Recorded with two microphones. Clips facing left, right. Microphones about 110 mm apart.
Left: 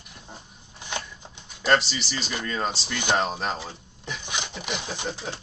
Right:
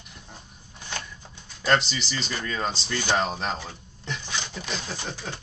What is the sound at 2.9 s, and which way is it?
Speech, 15° left (ahead or behind).